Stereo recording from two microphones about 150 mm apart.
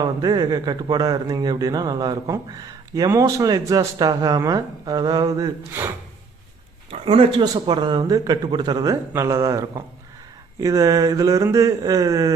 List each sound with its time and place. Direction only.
0.0 s speech: 25° right (ahead or behind)
6.9 s speech: 40° right (ahead or behind)